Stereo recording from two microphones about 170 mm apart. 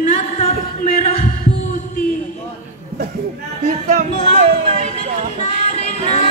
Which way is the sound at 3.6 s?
40° right (ahead or behind).